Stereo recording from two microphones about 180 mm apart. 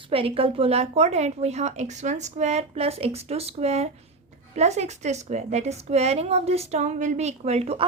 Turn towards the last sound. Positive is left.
turn(degrees=-35)  # may be behind; listen again after turning